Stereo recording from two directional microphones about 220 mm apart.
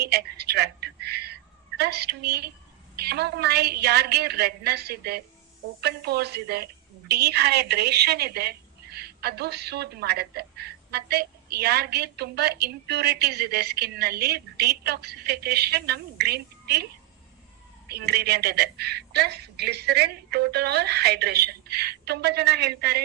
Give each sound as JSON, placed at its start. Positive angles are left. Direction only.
{"t": 0.0, "sound": "a sound", "side_deg": -45}
{"t": 2.9, "sound": "a woman's voice", "side_deg": -45}
{"t": 17.8, "sound": "a woman's voice", "side_deg": -45}